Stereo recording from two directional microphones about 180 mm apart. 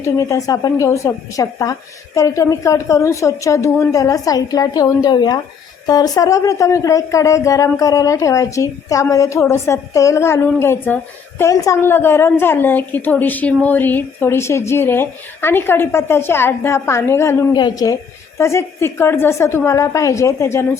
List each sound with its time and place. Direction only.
0.0 s speech: 15° left (ahead or behind)